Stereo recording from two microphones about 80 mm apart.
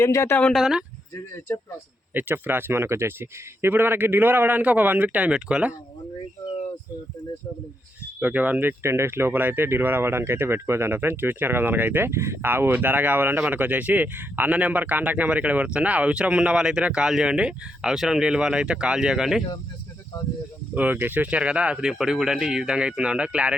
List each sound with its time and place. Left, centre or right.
0.0 s speech: left
0.5 s speech: centre
2.1 s speech: right
8.2 s speech: right
20.7 s speech: right